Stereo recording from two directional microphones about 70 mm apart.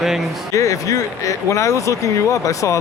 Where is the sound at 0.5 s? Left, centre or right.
Left.